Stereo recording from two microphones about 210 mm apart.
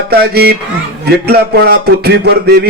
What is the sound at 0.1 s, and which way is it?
A man's voice, 50° right (ahead or behind).